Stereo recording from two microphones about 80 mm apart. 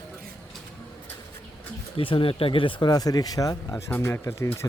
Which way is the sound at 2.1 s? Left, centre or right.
Left.